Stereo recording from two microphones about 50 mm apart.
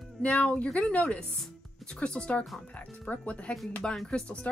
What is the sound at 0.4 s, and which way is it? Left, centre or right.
Speech, left.